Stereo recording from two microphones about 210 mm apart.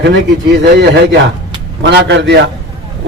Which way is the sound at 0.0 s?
55° right (ahead or behind).